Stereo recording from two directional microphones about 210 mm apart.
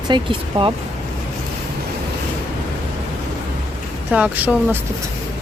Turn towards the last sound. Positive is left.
turn(degrees=-10)  # may be behind; listen again after turning